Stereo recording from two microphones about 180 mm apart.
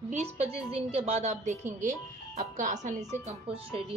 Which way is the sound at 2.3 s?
45° right (ahead or behind).